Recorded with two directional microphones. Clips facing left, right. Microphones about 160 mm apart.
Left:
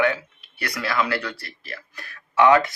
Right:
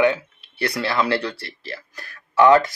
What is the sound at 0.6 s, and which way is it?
Speech, 30° right (ahead or behind).